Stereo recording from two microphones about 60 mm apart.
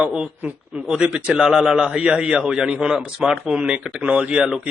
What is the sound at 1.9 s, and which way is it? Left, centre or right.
Speech, centre.